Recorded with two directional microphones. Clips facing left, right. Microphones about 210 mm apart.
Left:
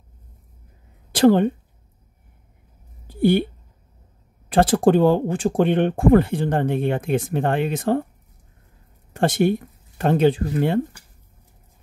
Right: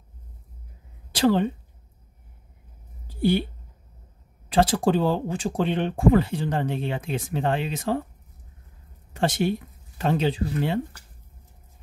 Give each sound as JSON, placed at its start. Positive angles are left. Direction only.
{"t": 1.1, "sound": "speech", "side_deg": 50}
{"t": 3.1, "sound": "a sound", "side_deg": 55}
{"t": 4.5, "sound": "speech", "side_deg": 50}
{"t": 9.1, "sound": "speech", "side_deg": 50}